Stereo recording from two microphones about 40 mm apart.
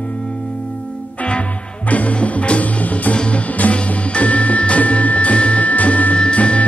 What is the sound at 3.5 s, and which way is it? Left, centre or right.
Music, left.